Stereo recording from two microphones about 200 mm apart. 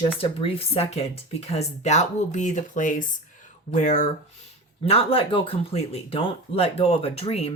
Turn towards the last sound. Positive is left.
turn(degrees=30)  # may be behind; listen again after turning